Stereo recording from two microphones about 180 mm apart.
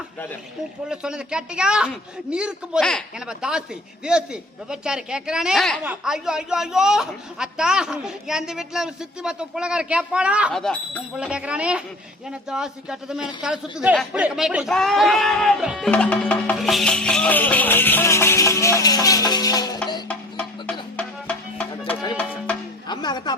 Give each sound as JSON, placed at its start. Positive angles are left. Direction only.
{"t": 0.9, "sound": "a woman's voice", "side_deg": -5}
{"t": 15.9, "sound": "music", "side_deg": 5}
{"t": 20.1, "sound": "music", "side_deg": 5}
{"t": 22.9, "sound": "speech", "side_deg": 25}